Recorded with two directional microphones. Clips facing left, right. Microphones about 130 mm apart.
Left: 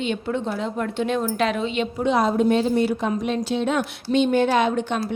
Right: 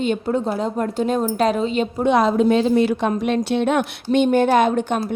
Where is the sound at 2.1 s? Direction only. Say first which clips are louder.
Right 3 dB; 90° right.